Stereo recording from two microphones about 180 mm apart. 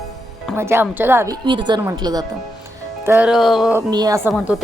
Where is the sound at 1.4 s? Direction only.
25° right (ahead or behind).